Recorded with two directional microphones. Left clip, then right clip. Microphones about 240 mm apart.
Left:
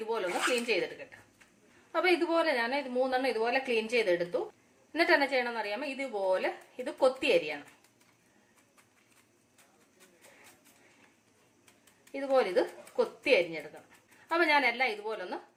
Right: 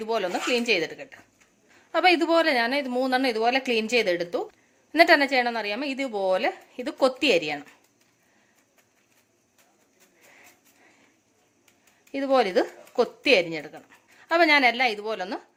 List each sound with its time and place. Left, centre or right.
0.0 s a woman's voice: right
12.1 s a woman's voice: right